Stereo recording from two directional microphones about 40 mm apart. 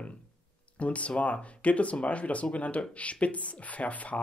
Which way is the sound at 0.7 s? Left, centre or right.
Left.